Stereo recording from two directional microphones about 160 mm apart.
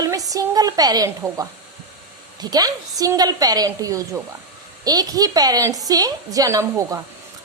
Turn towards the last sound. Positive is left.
turn(degrees=-20)  # may be behind; listen again after turning